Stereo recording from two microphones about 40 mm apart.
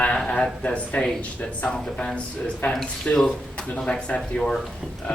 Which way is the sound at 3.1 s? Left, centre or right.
Left.